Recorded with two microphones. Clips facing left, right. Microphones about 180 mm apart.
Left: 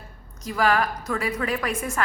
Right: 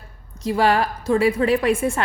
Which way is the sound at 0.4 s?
30° right (ahead or behind).